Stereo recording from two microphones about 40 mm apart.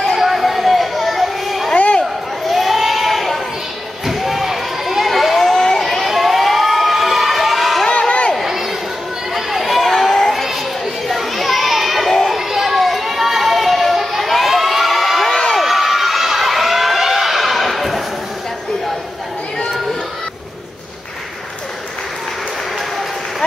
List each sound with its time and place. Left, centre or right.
0.0 s chatter: centre
1.7 s a sound: left
2.5 s sheep: centre
4.0 s a sound: centre
8.4 s crowd: centre
9.3 s a sound: centre
10.3 s children playing: centre
12.1 s children playing: centre
12.4 s children playing: centre
15.2 s crowd: centre